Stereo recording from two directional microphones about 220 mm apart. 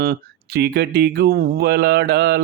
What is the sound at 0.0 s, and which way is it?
Mantra, 45° right (ahead or behind).